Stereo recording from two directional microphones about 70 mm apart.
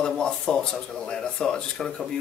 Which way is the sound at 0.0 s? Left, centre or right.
Centre.